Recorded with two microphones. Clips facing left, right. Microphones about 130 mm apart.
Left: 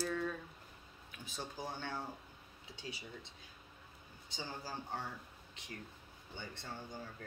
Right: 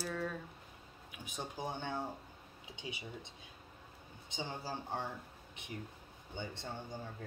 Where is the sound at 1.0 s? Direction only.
15° right (ahead or behind).